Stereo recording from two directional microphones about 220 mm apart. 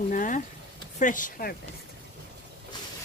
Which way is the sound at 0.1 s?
35° left (ahead or behind).